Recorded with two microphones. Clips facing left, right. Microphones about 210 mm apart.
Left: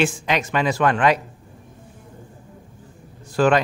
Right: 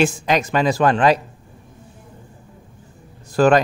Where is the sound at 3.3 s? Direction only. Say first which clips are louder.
Right 3 dB; 40° right (ahead or behind).